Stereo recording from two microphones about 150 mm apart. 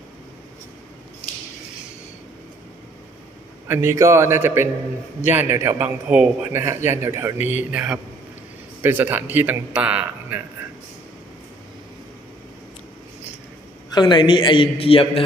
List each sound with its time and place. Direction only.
3.7 s a man's voice: 15° right (ahead or behind)
13.9 s a man's voice: 30° left (ahead or behind)